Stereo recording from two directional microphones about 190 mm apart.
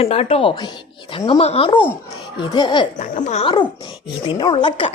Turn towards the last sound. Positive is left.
turn(degrees=25)  # may be behind; listen again after turning